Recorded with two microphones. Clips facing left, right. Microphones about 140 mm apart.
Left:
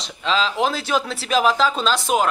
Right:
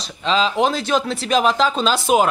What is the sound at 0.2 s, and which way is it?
Speech, centre (ahead or behind).